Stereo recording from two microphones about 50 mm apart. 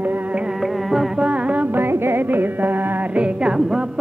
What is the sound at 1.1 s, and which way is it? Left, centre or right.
Music, right.